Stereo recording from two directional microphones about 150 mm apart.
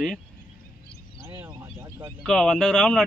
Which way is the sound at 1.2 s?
20° right (ahead or behind).